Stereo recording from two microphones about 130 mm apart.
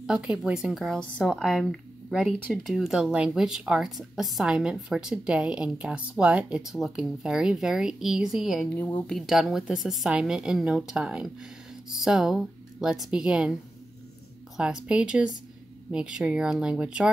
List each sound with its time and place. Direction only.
0.0 s speech: 5° right (ahead or behind)
8.7 s a woman's voice: 15° left (ahead or behind)
9.1 s speech: centre (ahead or behind)
14.6 s speech: 5° right (ahead or behind)